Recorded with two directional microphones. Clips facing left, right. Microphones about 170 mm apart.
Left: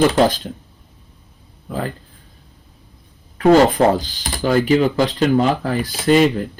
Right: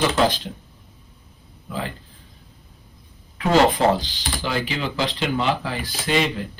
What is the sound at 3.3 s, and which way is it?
Speech, 45° left (ahead or behind).